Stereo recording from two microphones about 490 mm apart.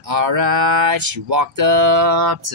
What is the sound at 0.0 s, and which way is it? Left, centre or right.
Speech, right.